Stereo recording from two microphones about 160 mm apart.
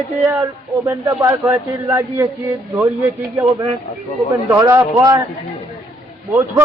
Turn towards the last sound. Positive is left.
turn(degrees=-20)  # may be behind; listen again after turning